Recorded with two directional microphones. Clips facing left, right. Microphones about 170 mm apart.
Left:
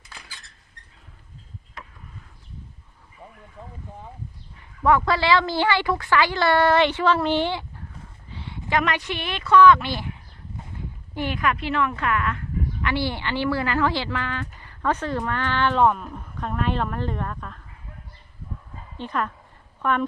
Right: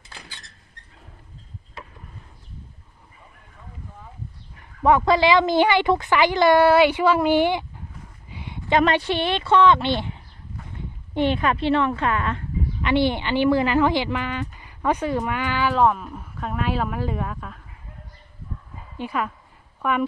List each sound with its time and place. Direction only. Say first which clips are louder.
4.8 s speech: right 3 dB; 20° right (ahead or behind)
8.3 s a sound: right 1 dB; 15° right (ahead or behind)
8.7 s a woman's voice: right 5 dB; 30° right (ahead or behind)
11.1 s speech: right 4 dB; 25° right (ahead or behind); by 17.6 s 5° right (ahead or behind)
18.9 s a woman's voice: right 1 dB; 10° right (ahead or behind)